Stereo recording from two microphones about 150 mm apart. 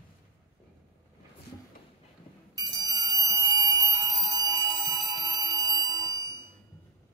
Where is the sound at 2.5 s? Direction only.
25° right (ahead or behind).